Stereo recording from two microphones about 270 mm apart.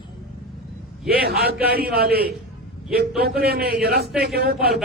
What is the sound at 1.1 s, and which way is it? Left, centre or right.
A man's voice, right.